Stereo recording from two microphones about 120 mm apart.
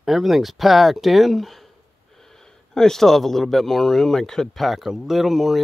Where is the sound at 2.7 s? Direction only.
5° left (ahead or behind).